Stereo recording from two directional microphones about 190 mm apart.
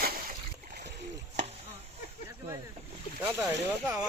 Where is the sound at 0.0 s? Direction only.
50° right (ahead or behind).